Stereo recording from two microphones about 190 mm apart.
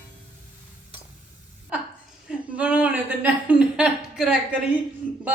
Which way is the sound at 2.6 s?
5° right (ahead or behind).